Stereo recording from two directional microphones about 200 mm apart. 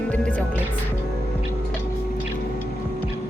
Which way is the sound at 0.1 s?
5° left (ahead or behind).